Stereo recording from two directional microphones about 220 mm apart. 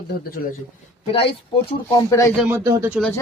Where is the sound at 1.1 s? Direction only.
25° left (ahead or behind).